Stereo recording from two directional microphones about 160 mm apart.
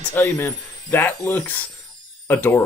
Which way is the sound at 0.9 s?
15° left (ahead or behind).